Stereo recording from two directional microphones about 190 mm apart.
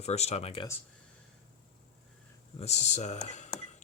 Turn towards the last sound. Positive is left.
turn(degrees=35)  # may be behind; listen again after turning